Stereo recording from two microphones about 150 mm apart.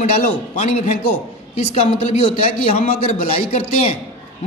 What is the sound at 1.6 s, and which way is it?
A man's voice, 45° left (ahead or behind).